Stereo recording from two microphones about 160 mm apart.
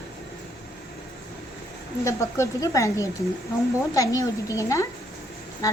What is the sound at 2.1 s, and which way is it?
A woman's voice, 20° left (ahead or behind).